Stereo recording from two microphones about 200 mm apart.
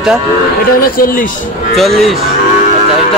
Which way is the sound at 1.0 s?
45° left (ahead or behind).